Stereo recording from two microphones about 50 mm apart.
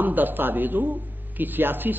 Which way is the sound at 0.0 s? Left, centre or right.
Right.